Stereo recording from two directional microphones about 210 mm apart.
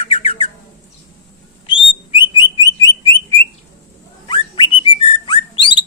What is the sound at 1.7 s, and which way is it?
Bird, 25° left (ahead or behind).